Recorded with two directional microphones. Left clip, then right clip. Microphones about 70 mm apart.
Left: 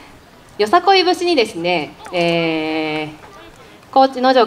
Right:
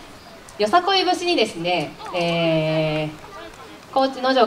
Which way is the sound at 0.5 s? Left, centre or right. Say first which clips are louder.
Left 5 dB; left.